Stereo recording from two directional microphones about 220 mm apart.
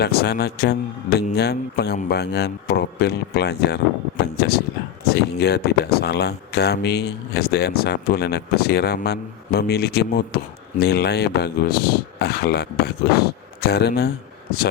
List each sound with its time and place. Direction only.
0.0 s speech: 45° left (ahead or behind)